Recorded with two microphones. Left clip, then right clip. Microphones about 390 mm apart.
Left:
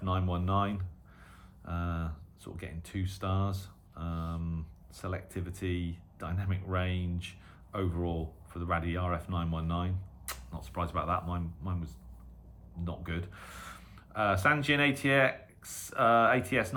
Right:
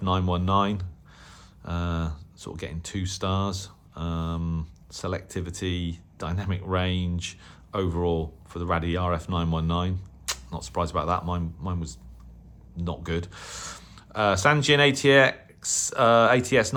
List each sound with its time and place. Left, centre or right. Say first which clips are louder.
0.0 s speech: right 8 dB; centre